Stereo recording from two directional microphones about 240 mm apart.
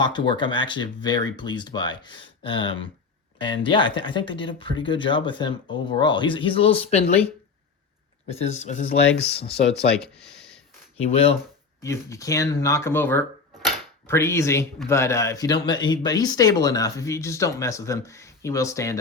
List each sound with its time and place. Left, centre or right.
0.0 s speech: centre
8.3 s speech: left
9.5 s speech: centre
10.9 s speech: left
11.8 s speech: centre